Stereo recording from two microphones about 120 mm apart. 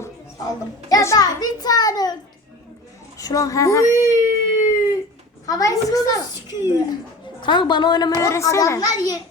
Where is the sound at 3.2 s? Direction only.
30° left (ahead or behind).